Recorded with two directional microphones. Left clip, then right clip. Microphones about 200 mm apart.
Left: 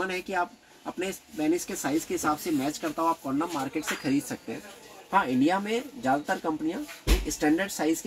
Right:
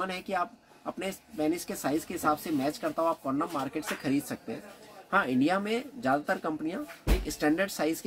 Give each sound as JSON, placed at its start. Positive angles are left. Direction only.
{"t": 0.3, "sound": "speech", "side_deg": -20}